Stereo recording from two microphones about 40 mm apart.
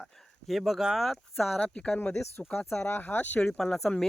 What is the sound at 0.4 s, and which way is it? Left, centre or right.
Speech, centre.